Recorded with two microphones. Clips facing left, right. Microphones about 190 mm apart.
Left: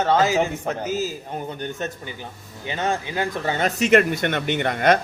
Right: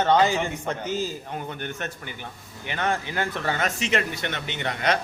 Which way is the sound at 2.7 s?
15° left (ahead or behind).